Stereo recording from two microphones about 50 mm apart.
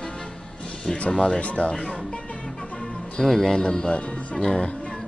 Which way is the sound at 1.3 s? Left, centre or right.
Left.